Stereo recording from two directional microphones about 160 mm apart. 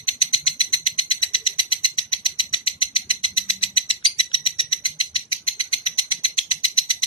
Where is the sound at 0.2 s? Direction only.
35° left (ahead or behind).